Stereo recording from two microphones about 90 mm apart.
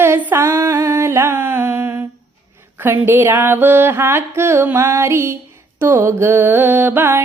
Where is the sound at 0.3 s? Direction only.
25° right (ahead or behind).